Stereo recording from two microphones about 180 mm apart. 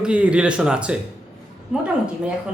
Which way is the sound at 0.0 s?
5° right (ahead or behind).